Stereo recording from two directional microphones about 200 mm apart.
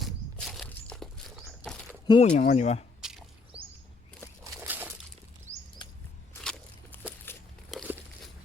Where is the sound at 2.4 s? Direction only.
35° left (ahead or behind).